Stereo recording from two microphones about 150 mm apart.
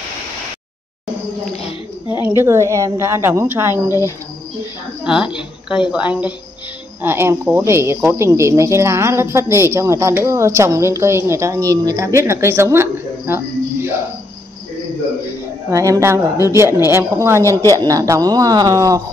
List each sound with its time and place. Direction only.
2.2 s speech: 15° right (ahead or behind)
5.0 s speech: 5° right (ahead or behind)
15.7 s speech: 20° right (ahead or behind)
17.4 s speech: 20° left (ahead or behind)
17.6 s speech: 25° right (ahead or behind)